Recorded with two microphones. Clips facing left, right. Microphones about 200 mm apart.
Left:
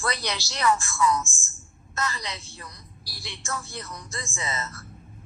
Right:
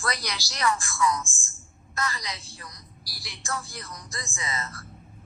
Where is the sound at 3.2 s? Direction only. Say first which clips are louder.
Even; 25° left (ahead or behind).